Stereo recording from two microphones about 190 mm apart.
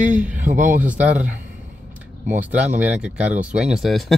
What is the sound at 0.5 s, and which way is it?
Speech, 45° right (ahead or behind).